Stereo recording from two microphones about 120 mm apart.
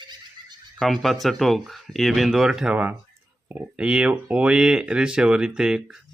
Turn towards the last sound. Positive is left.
turn(degrees=-5)  # may be behind; listen again after turning